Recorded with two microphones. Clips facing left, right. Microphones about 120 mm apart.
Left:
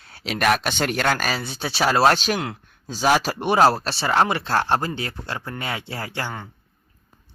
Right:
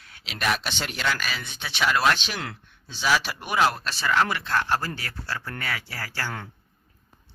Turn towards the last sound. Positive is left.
turn(degrees=20)  # may be behind; listen again after turning